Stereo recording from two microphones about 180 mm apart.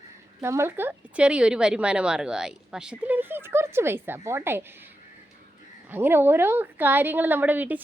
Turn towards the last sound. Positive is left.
turn(degrees=-10)  # may be behind; listen again after turning